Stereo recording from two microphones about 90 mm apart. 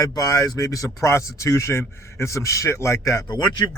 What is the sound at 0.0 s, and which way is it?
Speech, 45° left (ahead or behind).